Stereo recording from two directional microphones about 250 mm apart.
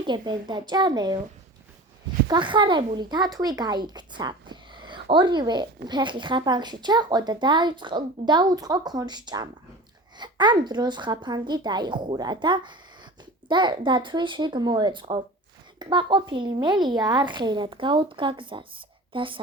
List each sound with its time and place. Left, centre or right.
0.0 s speech: centre
2.2 s a woman's voice: centre